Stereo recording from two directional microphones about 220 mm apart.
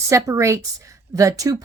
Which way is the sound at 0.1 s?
15° right (ahead or behind).